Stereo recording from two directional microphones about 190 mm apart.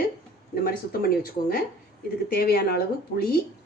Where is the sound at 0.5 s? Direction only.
50° left (ahead or behind).